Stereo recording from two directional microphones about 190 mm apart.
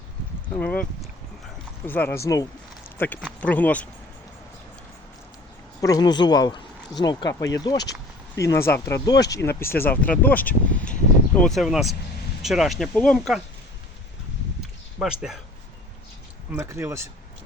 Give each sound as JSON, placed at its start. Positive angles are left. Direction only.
{"t": 0.5, "sound": "speech", "side_deg": 10}
{"t": 1.9, "sound": "speech", "side_deg": 10}
{"t": 3.0, "sound": "speech", "side_deg": 5}
{"t": 5.8, "sound": "speech", "side_deg": 20}
{"t": 14.9, "sound": "speech", "side_deg": -5}
{"t": 16.6, "sound": "speech", "side_deg": -15}